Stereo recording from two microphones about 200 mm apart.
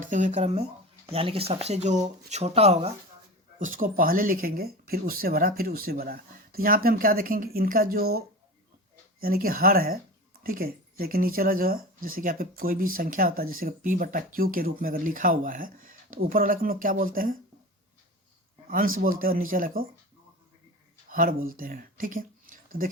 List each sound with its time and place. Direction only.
0.0 s speech: 40° right (ahead or behind)
3.6 s speech: 45° right (ahead or behind)
9.2 s speech: 45° right (ahead or behind)
18.9 s speech: 45° right (ahead or behind)
21.1 s speech: 45° right (ahead or behind)